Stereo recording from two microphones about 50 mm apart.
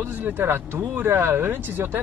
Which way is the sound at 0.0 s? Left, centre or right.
Right.